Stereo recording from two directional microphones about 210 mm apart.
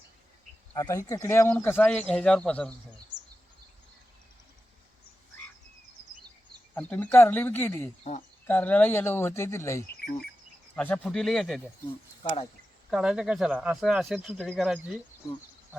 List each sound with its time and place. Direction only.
0.7 s speech: 15° left (ahead or behind)
6.7 s speech: 10° left (ahead or behind)
12.2 s speech: 25° left (ahead or behind)
12.9 s speech: 5° right (ahead or behind)